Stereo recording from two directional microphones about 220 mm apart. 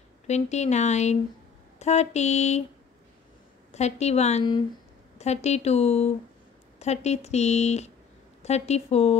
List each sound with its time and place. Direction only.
0.3 s speech: 30° left (ahead or behind)
3.7 s a woman's voice: 30° left (ahead or behind)